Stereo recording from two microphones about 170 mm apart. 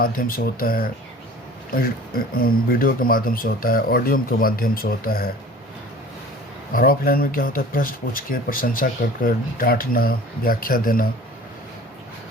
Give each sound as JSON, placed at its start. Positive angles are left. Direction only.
{"t": 0.0, "sound": "speech", "side_deg": 55}
{"t": 6.7, "sound": "speech", "side_deg": 60}